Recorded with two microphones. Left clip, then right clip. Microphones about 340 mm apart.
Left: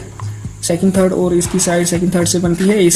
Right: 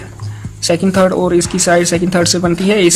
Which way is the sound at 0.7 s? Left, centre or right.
Right.